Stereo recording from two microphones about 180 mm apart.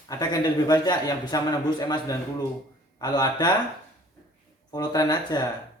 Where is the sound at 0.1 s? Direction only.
20° left (ahead or behind).